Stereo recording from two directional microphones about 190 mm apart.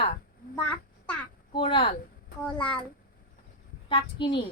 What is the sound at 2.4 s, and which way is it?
Speech, 5° left (ahead or behind).